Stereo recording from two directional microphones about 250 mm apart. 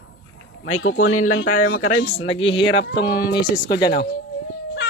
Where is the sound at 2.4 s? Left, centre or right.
Left.